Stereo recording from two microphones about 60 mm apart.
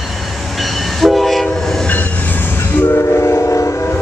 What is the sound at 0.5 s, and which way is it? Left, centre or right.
Train, centre.